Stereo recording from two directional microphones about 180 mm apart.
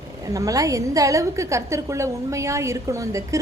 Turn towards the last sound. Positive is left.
turn(degrees=-15)  # may be behind; listen again after turning